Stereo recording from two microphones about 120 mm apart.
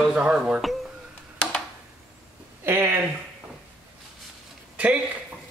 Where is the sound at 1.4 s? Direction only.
5° left (ahead or behind).